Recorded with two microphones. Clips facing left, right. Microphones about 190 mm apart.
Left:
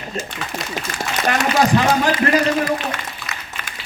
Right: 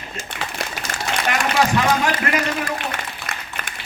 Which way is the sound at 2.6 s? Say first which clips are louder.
Left 4 dB; 55° right (ahead or behind).